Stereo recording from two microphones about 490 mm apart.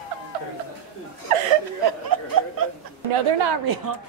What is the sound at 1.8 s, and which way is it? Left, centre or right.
Speech, right.